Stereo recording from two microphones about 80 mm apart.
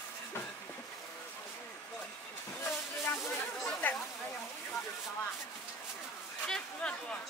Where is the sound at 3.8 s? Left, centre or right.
Left.